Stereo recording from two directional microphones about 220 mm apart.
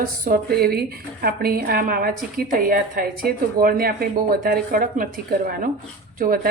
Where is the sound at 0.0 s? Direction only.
45° right (ahead or behind).